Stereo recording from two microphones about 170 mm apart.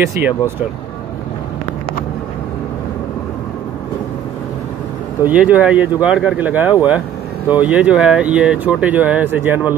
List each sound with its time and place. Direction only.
0.2 s speech: 15° right (ahead or behind)
5.2 s speech: 10° right (ahead or behind)